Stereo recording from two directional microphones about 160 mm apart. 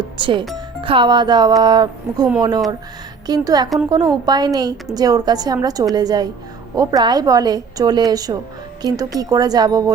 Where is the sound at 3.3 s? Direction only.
25° right (ahead or behind).